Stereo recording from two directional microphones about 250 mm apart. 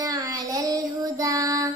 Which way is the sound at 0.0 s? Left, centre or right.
Centre.